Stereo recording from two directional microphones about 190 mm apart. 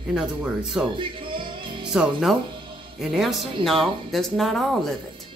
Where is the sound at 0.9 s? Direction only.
25° right (ahead or behind).